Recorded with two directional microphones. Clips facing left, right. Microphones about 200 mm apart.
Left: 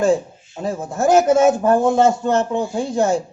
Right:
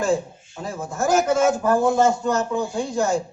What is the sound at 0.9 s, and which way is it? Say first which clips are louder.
Speech: left 5 dB; 25° left (ahead or behind).